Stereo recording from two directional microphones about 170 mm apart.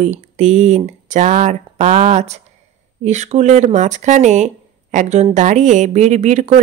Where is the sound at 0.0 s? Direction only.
45° right (ahead or behind).